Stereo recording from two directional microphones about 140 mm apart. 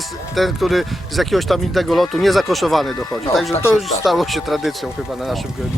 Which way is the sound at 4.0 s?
Centre (ahead or behind).